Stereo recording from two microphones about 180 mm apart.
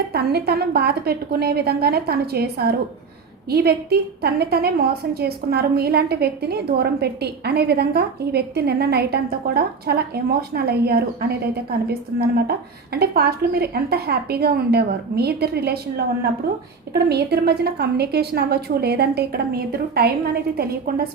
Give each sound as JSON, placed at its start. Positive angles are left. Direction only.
{"t": 0.1, "sound": "a woman's voice", "side_deg": -60}